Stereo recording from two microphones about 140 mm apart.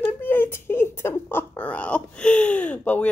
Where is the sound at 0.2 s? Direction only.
15° left (ahead or behind).